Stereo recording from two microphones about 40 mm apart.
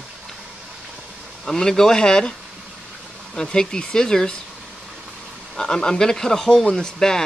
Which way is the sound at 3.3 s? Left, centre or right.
Centre.